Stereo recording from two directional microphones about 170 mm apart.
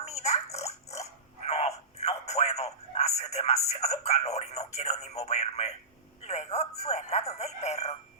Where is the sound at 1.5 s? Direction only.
40° left (ahead or behind).